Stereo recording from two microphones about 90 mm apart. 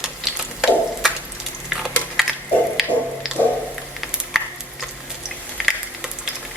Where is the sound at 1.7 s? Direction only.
5° right (ahead or behind).